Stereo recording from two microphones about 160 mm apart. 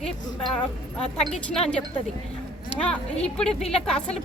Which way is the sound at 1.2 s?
5° left (ahead or behind).